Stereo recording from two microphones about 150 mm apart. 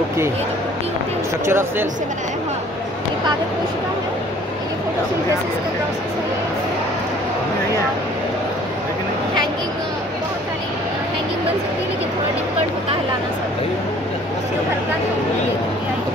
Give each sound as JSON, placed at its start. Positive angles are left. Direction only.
{"t": 1.4, "sound": "speech", "side_deg": -15}